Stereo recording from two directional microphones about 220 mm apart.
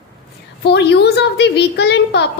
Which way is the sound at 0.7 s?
50° left (ahead or behind).